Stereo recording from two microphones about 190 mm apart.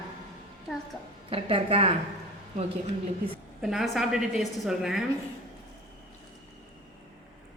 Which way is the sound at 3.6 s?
Centre (ahead or behind).